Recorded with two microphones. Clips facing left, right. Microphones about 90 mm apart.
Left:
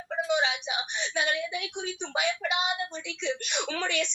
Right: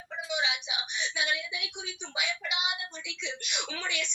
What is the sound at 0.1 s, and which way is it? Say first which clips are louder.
A woman's voice: left 6 dB; 45° left (ahead or behind).